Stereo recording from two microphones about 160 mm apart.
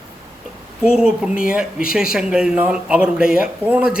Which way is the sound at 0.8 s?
5° right (ahead or behind).